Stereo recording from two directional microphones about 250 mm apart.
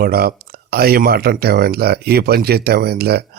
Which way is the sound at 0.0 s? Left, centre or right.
Right.